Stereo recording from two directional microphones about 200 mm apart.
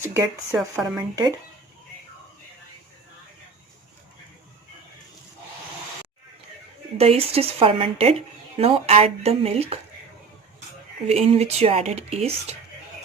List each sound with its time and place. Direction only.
0.0 s speech: 10° right (ahead or behind)
0.9 s speech: 15° right (ahead or behind)
6.9 s speech: 30° right (ahead or behind)
11.0 s speech: 30° right (ahead or behind)